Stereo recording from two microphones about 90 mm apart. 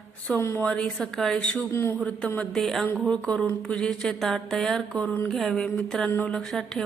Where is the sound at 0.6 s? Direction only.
10° left (ahead or behind).